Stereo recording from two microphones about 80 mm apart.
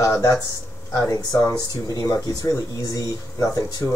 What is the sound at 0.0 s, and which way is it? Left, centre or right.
Speech, left.